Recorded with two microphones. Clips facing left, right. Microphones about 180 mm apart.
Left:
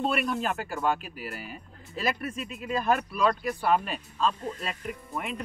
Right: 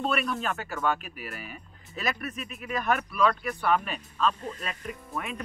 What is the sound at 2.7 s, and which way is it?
Speech, 30° left (ahead or behind).